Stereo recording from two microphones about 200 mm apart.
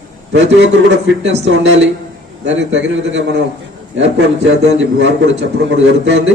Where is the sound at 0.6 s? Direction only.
65° right (ahead or behind).